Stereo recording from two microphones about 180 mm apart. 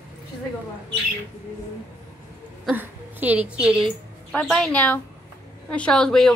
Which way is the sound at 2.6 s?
10° right (ahead or behind).